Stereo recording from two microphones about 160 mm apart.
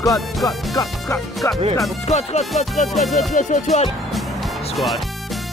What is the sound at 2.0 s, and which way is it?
Music, 45° left (ahead or behind).